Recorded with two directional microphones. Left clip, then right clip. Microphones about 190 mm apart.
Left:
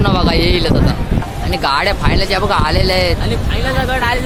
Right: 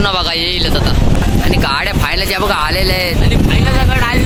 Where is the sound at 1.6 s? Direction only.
5° right (ahead or behind).